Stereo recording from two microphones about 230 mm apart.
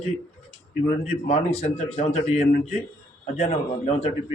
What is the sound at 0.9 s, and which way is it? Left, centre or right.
A man's voice, left.